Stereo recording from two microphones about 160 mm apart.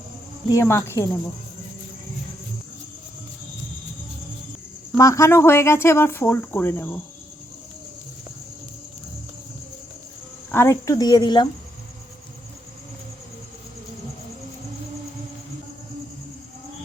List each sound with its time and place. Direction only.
0.4 s speech: 20° left (ahead or behind)
4.9 s speech: 20° left (ahead or behind)
10.5 s speech: 15° left (ahead or behind)